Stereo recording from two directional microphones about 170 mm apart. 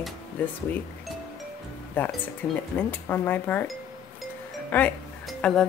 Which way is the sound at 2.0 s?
10° left (ahead or behind).